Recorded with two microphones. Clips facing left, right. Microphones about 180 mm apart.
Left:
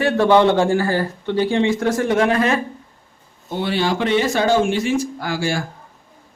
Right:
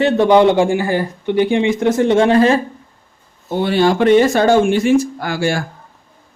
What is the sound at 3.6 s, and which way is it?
Speech, 50° right (ahead or behind).